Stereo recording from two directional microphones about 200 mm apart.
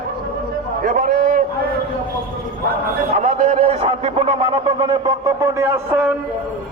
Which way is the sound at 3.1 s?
35° right (ahead or behind).